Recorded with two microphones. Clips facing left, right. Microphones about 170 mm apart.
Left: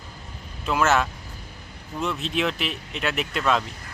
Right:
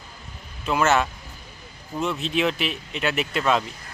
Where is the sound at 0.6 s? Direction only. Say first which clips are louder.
Right 1 dB; centre (ahead or behind).